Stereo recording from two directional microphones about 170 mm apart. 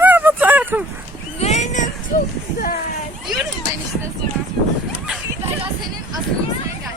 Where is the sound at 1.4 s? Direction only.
40° left (ahead or behind).